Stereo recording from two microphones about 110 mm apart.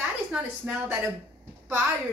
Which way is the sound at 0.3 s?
10° right (ahead or behind).